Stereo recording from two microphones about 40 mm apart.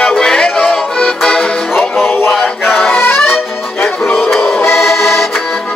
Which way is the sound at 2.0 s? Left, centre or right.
Left.